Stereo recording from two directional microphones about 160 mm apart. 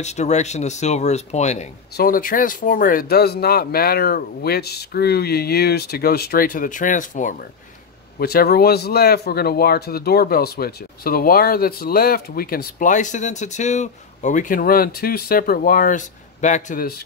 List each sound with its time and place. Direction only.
0.0 s speech: 45° left (ahead or behind)
2.0 s speech: 65° left (ahead or behind)
8.2 s speech: 70° left (ahead or behind); by 16.9 s 55° left (ahead or behind)